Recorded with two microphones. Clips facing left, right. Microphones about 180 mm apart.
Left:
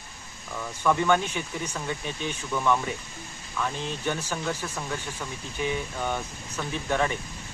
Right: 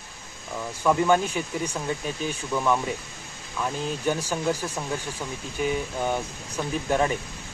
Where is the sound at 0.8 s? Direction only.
10° right (ahead or behind).